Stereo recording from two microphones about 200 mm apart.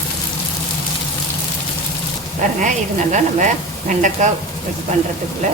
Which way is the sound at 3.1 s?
40° right (ahead or behind).